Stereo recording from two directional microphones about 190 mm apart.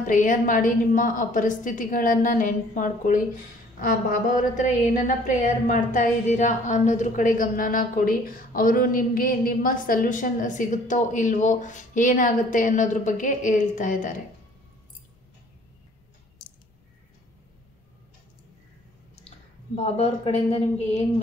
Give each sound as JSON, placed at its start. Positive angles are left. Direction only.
{"t": 0.0, "sound": "a woman's voice", "side_deg": 45}
{"t": 19.1, "sound": "speech", "side_deg": 30}